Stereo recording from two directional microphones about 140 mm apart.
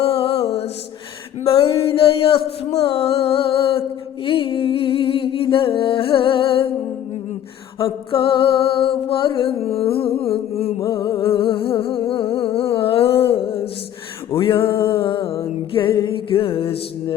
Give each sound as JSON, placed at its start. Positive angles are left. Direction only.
{"t": 0.0, "sound": "music", "side_deg": 45}
{"t": 1.5, "sound": "a sound", "side_deg": 45}
{"t": 4.3, "sound": "humming", "side_deg": 40}
{"t": 7.8, "sound": "humming", "side_deg": 40}
{"t": 10.2, "sound": "a sound", "side_deg": 45}
{"t": 10.8, "sound": "music", "side_deg": 20}
{"t": 11.1, "sound": "humming", "side_deg": 40}
{"t": 14.3, "sound": "music", "side_deg": 40}